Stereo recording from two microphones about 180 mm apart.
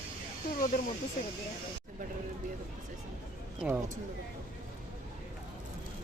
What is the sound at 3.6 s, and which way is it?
Speech, 5° right (ahead or behind).